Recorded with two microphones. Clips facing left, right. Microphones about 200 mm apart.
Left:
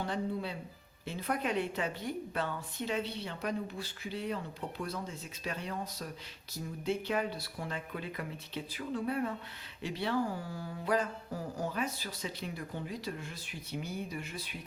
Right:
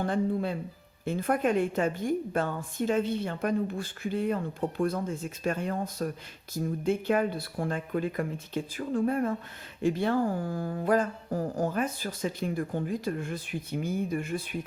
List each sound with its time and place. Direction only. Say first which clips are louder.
0.0 s a woman's voice: right 7 dB; 50° right (ahead or behind)